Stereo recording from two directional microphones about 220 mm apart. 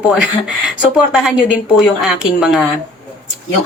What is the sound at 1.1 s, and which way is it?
Speech, centre (ahead or behind).